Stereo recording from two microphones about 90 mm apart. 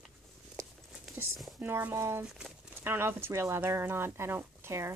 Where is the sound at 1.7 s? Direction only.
25° right (ahead or behind).